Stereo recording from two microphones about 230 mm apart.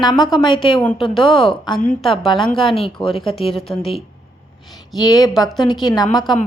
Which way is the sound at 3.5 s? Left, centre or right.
Centre.